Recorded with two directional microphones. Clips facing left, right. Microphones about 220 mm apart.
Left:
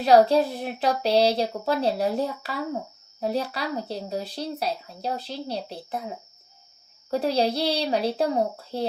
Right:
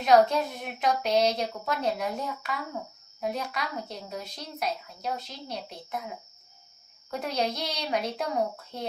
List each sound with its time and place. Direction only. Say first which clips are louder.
0.0 s speech: left 4 dB; 35° left (ahead or behind)